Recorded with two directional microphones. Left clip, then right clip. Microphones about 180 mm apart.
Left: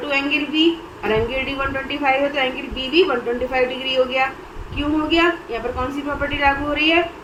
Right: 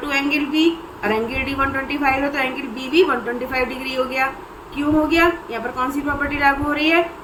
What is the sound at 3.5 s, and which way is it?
Speech, 25° right (ahead or behind).